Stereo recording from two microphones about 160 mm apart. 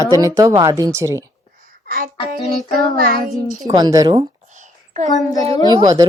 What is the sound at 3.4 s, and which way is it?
Speech, 25° right (ahead or behind).